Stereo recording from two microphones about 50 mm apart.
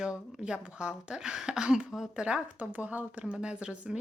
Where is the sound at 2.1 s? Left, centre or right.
Centre.